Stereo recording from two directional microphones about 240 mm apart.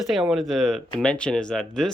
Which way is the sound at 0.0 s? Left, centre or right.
Centre.